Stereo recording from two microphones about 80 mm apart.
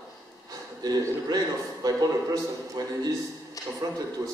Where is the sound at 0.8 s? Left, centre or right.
Right.